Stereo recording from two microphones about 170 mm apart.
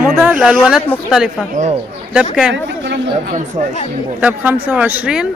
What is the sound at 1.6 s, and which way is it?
Speech, 45° right (ahead or behind).